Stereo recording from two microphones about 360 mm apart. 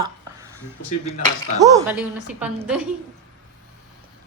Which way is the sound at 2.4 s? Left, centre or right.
Centre.